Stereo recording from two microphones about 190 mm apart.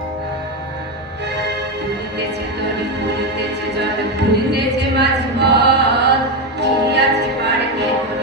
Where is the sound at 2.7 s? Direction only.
60° right (ahead or behind).